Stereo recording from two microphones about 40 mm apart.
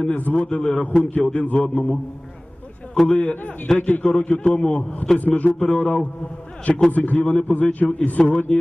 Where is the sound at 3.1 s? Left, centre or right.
Left.